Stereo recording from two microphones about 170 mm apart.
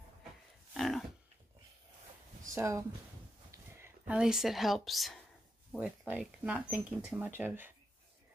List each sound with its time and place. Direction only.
0.7 s livestock: centre (ahead or behind)
2.5 s speech: 15° right (ahead or behind)
3.5 s a sound: 15° right (ahead or behind)
4.2 s a woman's voice: centre (ahead or behind)